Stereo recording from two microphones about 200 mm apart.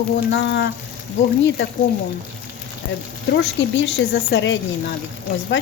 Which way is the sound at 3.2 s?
60° left (ahead or behind).